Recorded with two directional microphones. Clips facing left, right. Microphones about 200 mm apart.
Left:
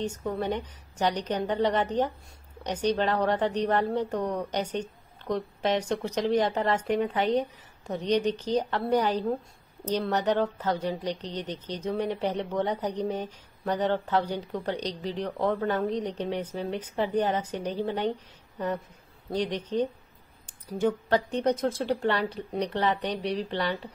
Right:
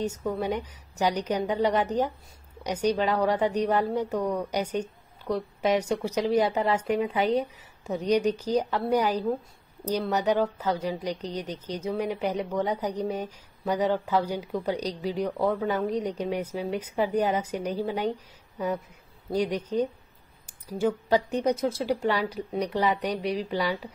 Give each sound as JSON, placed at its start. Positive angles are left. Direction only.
{"t": 0.4, "sound": "a woman's voice", "side_deg": -10}